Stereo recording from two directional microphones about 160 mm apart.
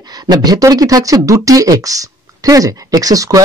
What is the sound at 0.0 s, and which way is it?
A woman's voice, 25° right (ahead or behind).